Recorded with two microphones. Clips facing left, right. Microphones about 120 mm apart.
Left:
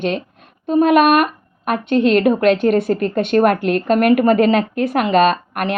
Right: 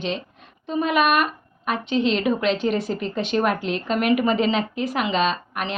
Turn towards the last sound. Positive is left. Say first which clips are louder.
# left 7 dB
turn(degrees=55)  # may be behind; listen again after turning